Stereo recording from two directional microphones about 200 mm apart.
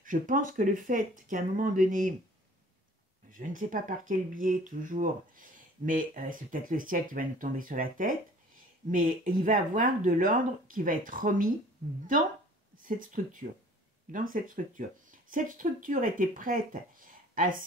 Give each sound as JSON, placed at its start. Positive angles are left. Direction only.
{"t": 0.0, "sound": "speech", "side_deg": -40}
{"t": 3.3, "sound": "speech", "side_deg": -40}
{"t": 12.7, "sound": "speech", "side_deg": -40}